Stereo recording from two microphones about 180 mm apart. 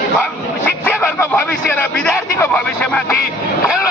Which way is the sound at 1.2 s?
10° left (ahead or behind).